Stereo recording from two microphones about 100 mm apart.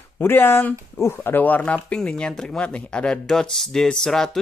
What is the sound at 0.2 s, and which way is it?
Speech, 20° left (ahead or behind).